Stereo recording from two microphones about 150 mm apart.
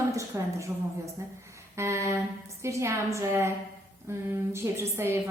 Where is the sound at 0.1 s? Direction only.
20° right (ahead or behind).